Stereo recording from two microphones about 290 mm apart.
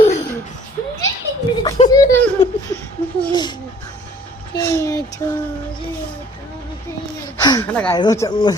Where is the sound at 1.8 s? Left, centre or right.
Left.